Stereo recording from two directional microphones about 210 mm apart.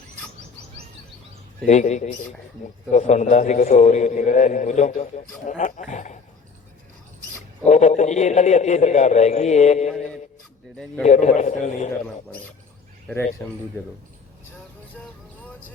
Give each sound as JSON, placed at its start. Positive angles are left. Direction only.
{"t": 1.6, "sound": "a man's voice", "side_deg": 35}
{"t": 7.7, "sound": "a man's voice", "side_deg": 35}
{"t": 11.0, "sound": "a man's voice", "side_deg": 35}
{"t": 13.4, "sound": "a man's voice", "side_deg": 10}